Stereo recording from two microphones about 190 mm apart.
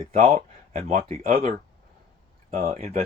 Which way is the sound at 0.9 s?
50° right (ahead or behind).